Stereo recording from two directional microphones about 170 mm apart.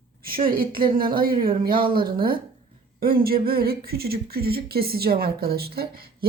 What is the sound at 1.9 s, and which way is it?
Speech, 60° right (ahead or behind).